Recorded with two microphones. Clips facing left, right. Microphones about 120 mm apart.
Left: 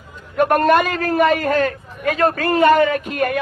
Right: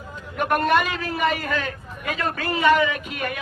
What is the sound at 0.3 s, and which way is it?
A man's voice, 50° left (ahead or behind).